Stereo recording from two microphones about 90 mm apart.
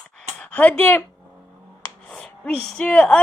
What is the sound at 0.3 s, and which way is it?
Speech, 15° left (ahead or behind).